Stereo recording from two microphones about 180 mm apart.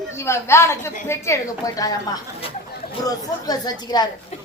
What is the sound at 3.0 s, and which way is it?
Speech, 20° left (ahead or behind).